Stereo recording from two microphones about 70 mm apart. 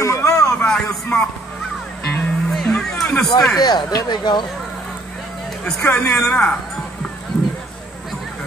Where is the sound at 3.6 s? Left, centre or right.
Left.